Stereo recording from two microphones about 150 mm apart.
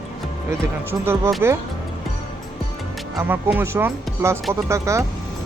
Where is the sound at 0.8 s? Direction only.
15° right (ahead or behind).